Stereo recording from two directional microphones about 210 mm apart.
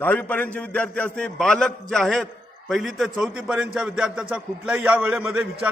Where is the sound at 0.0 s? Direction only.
10° left (ahead or behind).